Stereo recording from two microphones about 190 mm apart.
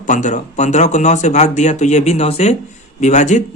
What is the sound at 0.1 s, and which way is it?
Speech, 40° left (ahead or behind).